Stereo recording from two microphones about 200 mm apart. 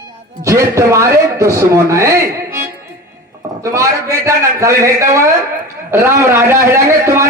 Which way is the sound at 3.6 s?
15° right (ahead or behind).